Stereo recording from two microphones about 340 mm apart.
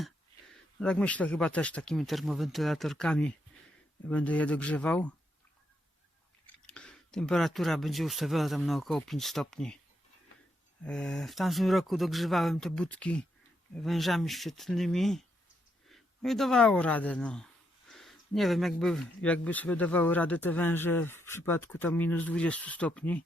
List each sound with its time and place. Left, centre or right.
0.8 s speech: centre
6.7 s speech: centre
10.8 s speech: centre